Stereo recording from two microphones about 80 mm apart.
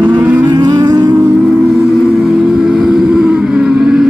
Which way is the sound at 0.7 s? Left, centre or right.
Right.